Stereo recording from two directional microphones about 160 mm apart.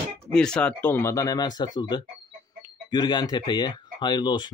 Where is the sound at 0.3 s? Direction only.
5° left (ahead or behind).